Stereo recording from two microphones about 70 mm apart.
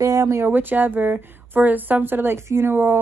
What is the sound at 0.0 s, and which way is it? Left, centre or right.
Speech, right.